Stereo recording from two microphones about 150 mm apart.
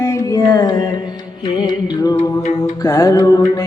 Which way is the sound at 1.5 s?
30° left (ahead or behind).